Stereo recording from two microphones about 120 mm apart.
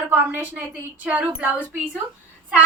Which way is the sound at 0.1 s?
15° right (ahead or behind).